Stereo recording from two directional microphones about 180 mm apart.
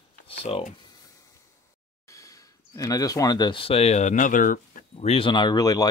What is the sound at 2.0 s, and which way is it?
Speech, 15° left (ahead or behind).